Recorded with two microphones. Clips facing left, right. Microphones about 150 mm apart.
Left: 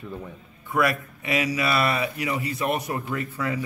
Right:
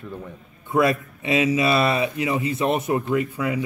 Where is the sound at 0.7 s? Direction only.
25° right (ahead or behind).